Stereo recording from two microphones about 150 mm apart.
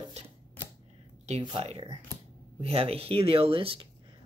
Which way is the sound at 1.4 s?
40° right (ahead or behind).